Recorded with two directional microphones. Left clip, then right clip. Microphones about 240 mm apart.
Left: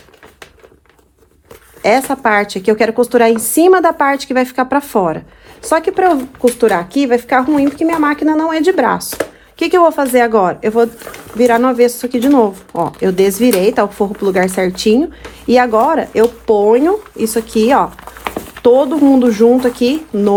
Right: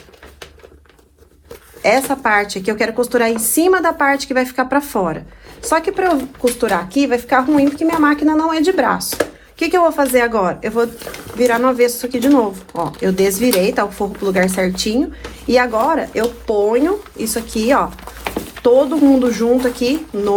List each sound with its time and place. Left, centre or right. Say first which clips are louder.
1.8 s speech: left 2 dB; left
18.2 s a sound: left 2 dB; centre
18.6 s speech: left 2 dB; left